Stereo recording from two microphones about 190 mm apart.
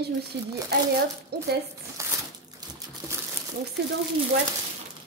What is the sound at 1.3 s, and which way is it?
Speech, 60° right (ahead or behind).